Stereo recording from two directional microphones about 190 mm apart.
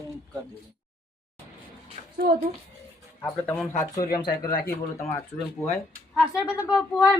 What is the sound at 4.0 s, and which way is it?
Speech, 50° left (ahead or behind).